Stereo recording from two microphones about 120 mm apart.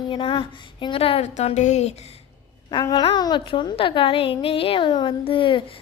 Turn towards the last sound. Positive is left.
turn(degrees=45)  # may be behind; listen again after turning